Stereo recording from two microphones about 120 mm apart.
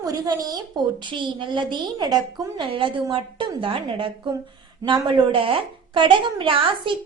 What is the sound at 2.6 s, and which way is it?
A woman's voice, 45° right (ahead or behind).